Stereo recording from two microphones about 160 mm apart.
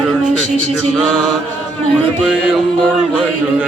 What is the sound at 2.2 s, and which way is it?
Music, 10° right (ahead or behind).